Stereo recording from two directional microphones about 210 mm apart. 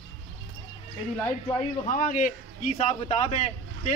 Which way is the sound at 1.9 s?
40° left (ahead or behind).